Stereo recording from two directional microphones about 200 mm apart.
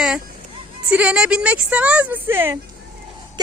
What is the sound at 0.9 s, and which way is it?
A woman's voice, 5° right (ahead or behind).